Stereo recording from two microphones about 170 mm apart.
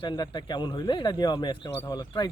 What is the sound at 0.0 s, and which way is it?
A man's voice, 25° left (ahead or behind).